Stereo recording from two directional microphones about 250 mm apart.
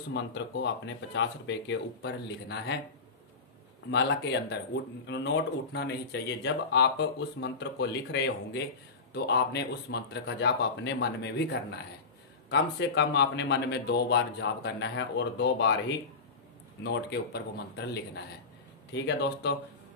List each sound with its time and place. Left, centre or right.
0.1 s speech: left
1.7 s speech: left
3.9 s speech: left
12.4 s speech: left
16.8 s speech: left